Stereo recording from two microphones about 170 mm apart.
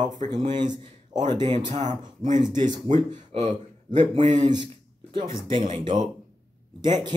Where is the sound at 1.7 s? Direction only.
45° right (ahead or behind).